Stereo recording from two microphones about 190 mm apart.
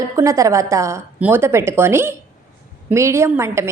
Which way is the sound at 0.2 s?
15° right (ahead or behind).